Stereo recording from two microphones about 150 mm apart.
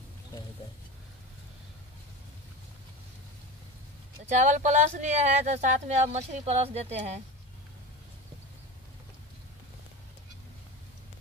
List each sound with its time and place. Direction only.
4.3 s speech: 55° right (ahead or behind)